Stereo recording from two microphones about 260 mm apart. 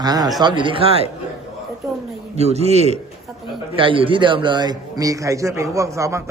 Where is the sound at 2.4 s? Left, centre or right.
Right.